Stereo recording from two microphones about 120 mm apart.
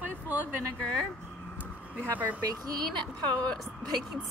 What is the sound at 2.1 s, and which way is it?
Speech, 15° right (ahead or behind).